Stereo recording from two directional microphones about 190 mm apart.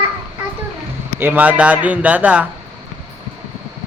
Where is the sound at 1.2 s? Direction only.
10° right (ahead or behind).